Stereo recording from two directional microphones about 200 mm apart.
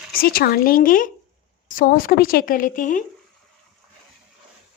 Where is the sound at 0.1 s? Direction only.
50° left (ahead or behind).